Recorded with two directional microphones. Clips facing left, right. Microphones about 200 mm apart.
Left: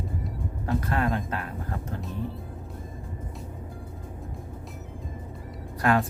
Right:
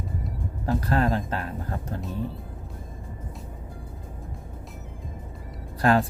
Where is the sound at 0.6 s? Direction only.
35° right (ahead or behind).